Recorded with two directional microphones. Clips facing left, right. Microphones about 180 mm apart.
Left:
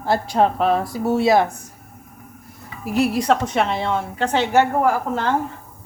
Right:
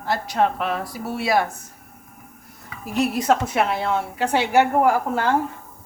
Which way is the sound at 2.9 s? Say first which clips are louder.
Left 2 dB; centre (ahead or behind).